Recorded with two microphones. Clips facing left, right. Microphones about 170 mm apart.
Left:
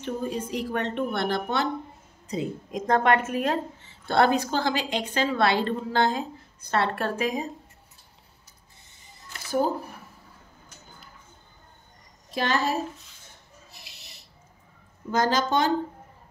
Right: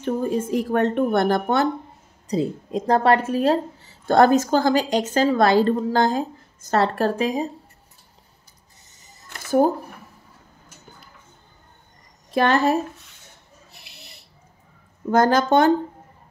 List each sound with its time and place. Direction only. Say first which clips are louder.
0.0 s a woman's voice: right 7 dB; 50° right (ahead or behind)
2.2 s a woman's voice: right 7 dB; 35° right (ahead or behind)
8.9 s a sound: right 3 dB; 45° right (ahead or behind)
12.4 s a woman's voice: right 7 dB; 55° right (ahead or behind)
13.7 s a sound: right 3 dB; 55° right (ahead or behind)
15.0 s a woman's voice: right 7 dB; 55° right (ahead or behind)